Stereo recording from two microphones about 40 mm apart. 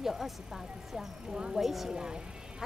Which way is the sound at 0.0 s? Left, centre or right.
Centre.